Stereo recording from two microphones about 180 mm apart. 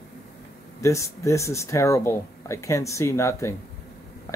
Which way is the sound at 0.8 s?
15° left (ahead or behind).